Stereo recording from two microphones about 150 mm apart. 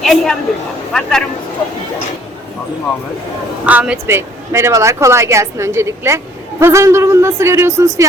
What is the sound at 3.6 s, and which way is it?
Speech, 10° right (ahead or behind).